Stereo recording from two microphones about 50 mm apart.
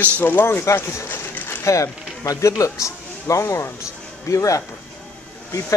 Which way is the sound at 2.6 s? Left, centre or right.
Left.